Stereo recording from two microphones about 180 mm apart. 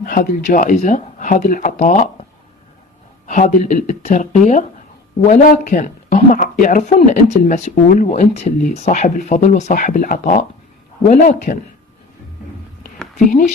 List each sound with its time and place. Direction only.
0.0 s speech: 50° left (ahead or behind)
3.3 s speech: 45° left (ahead or behind)